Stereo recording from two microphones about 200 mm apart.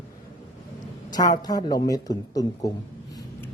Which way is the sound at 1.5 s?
20° left (ahead or behind).